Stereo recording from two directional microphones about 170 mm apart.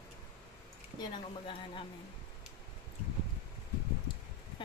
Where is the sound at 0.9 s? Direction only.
30° left (ahead or behind).